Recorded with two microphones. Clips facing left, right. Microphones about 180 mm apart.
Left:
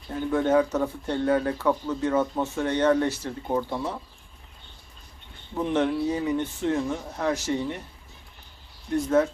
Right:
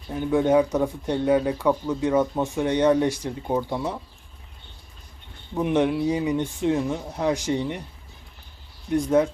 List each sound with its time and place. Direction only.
0.1 s speech: 15° right (ahead or behind)
5.5 s speech: 15° right (ahead or behind)
9.0 s speech: 15° right (ahead or behind)